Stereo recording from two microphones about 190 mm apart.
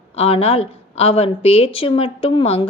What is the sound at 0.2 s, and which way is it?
A woman's voice, 30° left (ahead or behind).